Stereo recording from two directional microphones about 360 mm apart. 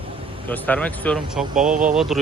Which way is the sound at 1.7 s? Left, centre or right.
Right.